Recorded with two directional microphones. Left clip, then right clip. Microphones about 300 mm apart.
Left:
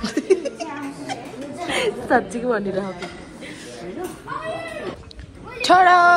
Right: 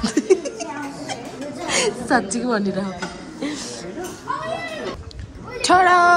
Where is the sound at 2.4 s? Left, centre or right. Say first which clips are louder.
Even; centre.